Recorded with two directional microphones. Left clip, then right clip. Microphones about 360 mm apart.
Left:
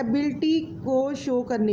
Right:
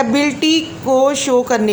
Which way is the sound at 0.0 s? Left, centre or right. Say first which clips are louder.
Right 10 dB; left.